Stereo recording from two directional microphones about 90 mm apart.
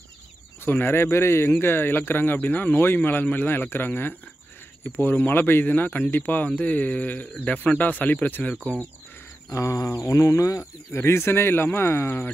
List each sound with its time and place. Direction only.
0.7 s speech: 25° left (ahead or behind)
9.5 s speech: 35° left (ahead or behind)